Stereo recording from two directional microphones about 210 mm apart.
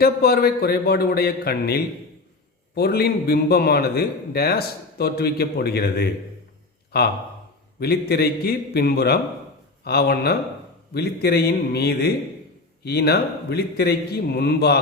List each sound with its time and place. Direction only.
0.0 s a man's voice: 50° left (ahead or behind)